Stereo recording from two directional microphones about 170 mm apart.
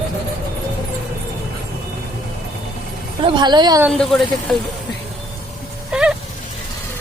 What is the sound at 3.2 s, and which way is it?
Speech, 25° right (ahead or behind).